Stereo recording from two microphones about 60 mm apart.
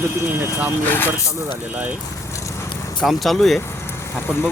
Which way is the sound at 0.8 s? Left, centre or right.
Left.